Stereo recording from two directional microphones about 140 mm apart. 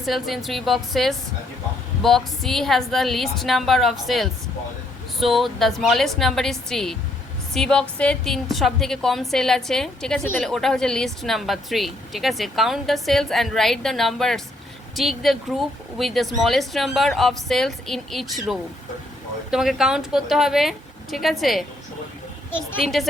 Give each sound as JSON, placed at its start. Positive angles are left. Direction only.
{"t": 0.0, "sound": "speech", "side_deg": 0}